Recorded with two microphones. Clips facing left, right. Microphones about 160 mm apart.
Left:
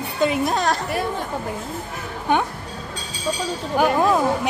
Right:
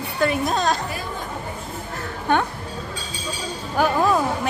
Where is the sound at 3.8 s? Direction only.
20° left (ahead or behind).